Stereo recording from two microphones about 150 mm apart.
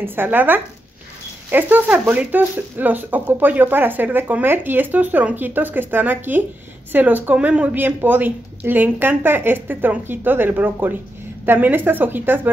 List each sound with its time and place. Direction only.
0.0 s speech: 15° right (ahead or behind)